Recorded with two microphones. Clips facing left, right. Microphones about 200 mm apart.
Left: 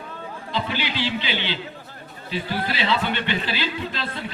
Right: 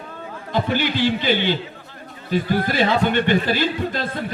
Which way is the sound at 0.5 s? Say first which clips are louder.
Right 6 dB; 50° right (ahead or behind).